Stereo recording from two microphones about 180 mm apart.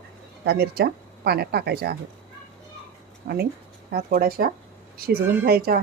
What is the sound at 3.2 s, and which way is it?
A woman's voice, 60° right (ahead or behind).